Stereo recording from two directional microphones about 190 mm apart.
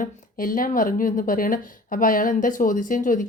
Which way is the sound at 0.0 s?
45° left (ahead or behind).